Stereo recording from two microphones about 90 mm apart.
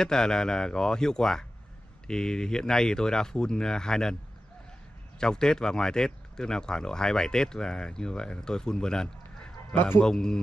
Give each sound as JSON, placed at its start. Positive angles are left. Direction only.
{"t": 0.0, "sound": "speech", "side_deg": 5}
{"t": 5.2, "sound": "speech", "side_deg": 10}
{"t": 9.8, "sound": "a man's voice", "side_deg": 20}
{"t": 10.0, "sound": "speech", "side_deg": 5}